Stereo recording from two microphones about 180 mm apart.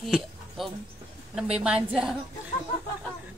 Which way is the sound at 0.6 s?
Centre (ahead or behind).